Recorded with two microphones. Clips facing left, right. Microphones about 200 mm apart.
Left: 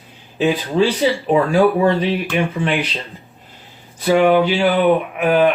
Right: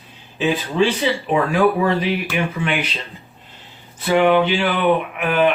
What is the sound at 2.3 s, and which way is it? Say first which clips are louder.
Speech: left 5 dB; 35° left (ahead or behind).